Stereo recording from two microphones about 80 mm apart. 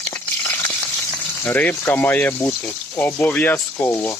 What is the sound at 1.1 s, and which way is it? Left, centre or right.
Frying, left.